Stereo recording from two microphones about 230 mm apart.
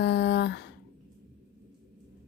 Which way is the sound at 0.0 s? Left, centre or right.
Left.